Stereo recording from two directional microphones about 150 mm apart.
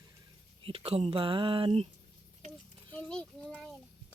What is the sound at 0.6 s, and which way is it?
Speech, 40° right (ahead or behind).